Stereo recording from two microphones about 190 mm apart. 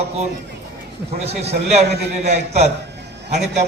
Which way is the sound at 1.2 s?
35° right (ahead or behind).